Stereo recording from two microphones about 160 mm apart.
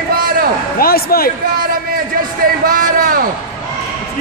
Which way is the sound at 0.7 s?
70° left (ahead or behind).